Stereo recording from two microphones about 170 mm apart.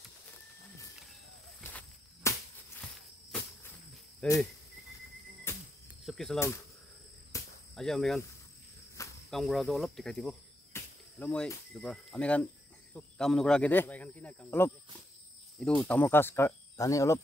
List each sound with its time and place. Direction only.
1.6 s walk: 10° left (ahead or behind)
4.2 s speech: 5° left (ahead or behind)
5.5 s music: 15° left (ahead or behind)
6.0 s speech: centre (ahead or behind)
7.3 s cricket: 20° left (ahead or behind)
7.7 s speech: centre (ahead or behind)
9.0 s cricket: 15° left (ahead or behind)
9.3 s speech: centre (ahead or behind)
15.9 s speech: 10° left (ahead or behind)